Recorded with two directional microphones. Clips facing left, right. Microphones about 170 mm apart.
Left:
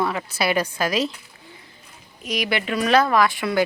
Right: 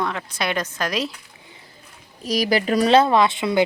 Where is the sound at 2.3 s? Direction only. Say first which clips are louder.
Right 5 dB; 35° right (ahead or behind).